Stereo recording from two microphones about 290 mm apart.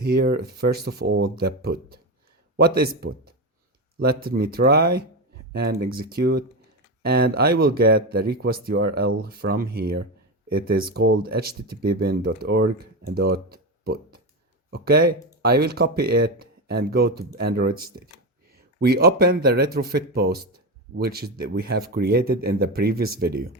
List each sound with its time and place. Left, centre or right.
0.0 s speech: right